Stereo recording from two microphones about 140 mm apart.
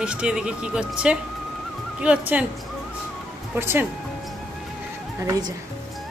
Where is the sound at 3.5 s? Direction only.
15° right (ahead or behind).